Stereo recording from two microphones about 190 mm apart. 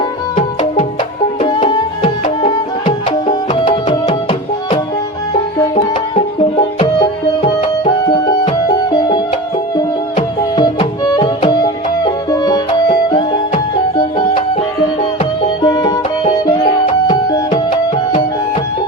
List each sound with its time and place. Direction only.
1.4 s music: 25° left (ahead or behind)
15.6 s music: 20° left (ahead or behind)